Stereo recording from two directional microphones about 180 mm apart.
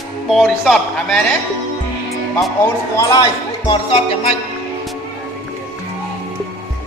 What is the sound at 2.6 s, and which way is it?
Speech, 15° left (ahead or behind).